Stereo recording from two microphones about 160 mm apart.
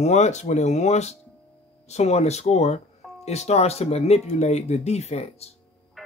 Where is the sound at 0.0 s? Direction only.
45° left (ahead or behind).